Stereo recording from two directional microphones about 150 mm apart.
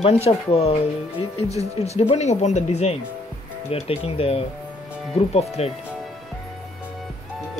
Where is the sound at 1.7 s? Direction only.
45° left (ahead or behind).